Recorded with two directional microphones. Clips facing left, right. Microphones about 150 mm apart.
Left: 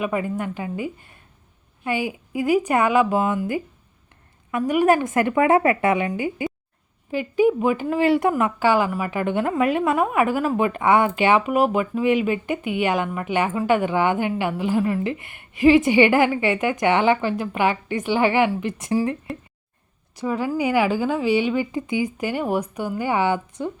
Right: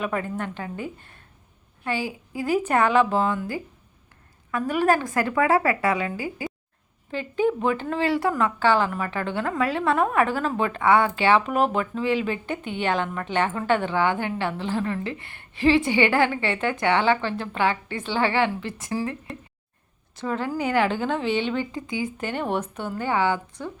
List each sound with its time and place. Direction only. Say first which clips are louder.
0.0 s a woman's voice: left 3 dB; 10° left (ahead or behind)
7.1 s a woman's voice: left 5 dB; 10° left (ahead or behind)
20.1 s a woman's voice: left 3 dB; 10° left (ahead or behind)